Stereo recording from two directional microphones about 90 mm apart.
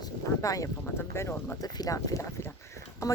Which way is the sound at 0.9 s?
25° left (ahead or behind).